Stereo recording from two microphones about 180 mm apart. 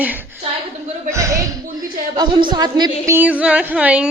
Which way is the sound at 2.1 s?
25° right (ahead or behind).